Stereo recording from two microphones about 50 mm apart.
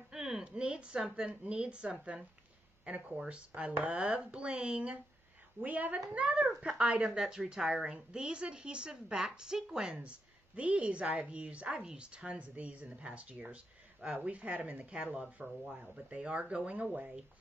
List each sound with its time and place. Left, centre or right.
0.1 s a sound: centre
0.4 s a woman's voice: centre
5.6 s a woman's voice: right; by 10.0 s centre
10.0 s a woman's voice: right